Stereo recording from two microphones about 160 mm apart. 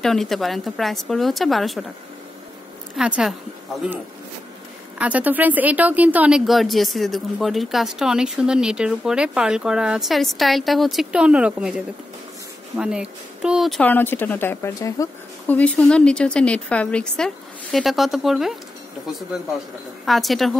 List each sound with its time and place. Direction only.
0.0 s speech: centre (ahead or behind)
3.0 s speech: 5° right (ahead or behind)
4.9 s speech: 10° right (ahead or behind); by 15.5 s 20° left (ahead or behind)
15.5 s speech: 5° left (ahead or behind)
20.1 s speech: centre (ahead or behind)